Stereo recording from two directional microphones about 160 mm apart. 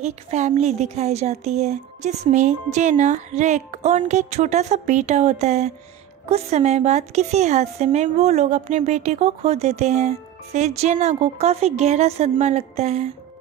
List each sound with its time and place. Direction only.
0.0 s speech: 45° right (ahead or behind)